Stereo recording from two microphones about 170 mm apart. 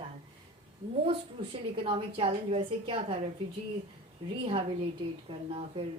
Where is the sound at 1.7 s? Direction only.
35° right (ahead or behind).